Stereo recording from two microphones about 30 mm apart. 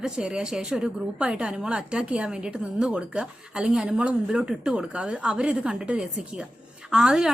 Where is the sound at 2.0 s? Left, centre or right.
Right.